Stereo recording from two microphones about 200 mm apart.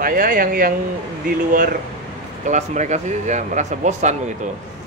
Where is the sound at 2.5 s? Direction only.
35° right (ahead or behind).